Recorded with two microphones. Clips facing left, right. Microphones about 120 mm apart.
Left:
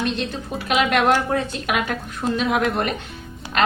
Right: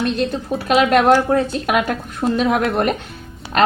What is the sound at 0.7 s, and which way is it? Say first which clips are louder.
A woman's voice: right 5 dB; 35° right (ahead or behind).